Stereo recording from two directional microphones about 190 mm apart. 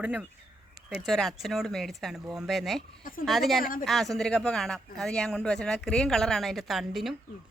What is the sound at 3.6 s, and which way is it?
Speech, 45° left (ahead or behind).